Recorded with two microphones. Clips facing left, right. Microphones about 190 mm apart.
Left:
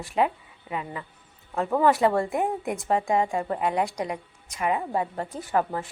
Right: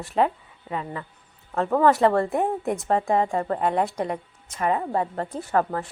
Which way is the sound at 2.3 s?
35° right (ahead or behind).